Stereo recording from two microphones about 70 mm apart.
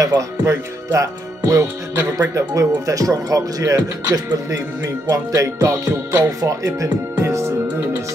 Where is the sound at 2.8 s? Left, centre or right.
Right.